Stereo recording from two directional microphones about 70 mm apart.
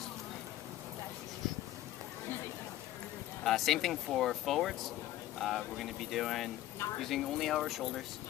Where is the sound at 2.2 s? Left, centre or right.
Left.